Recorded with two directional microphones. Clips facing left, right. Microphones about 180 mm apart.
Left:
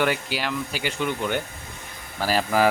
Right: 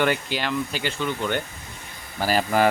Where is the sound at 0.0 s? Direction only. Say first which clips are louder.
Right 1 dB; 5° left (ahead or behind).